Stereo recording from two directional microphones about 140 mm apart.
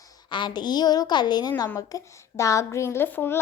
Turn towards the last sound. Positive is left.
turn(degrees=15)  # may be behind; listen again after turning